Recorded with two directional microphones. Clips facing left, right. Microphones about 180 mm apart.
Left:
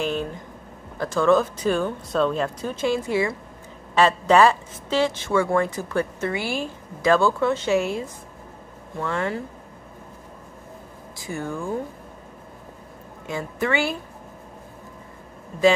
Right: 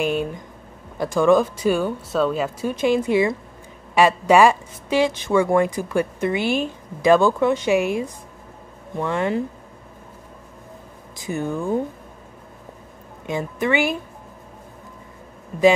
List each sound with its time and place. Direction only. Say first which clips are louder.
0.0 s a sound: right 3 dB; 15° right (ahead or behind)
0.9 s a woman's voice: right 3 dB; 15° right (ahead or behind)
11.1 s speech: right 4 dB; 20° right (ahead or behind)
13.3 s a woman's voice: right 3 dB; 20° right (ahead or behind)